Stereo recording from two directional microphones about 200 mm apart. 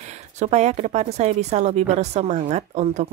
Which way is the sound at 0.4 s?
35° right (ahead or behind).